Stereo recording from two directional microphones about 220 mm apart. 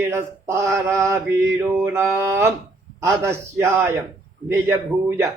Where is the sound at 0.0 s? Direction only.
10° right (ahead or behind).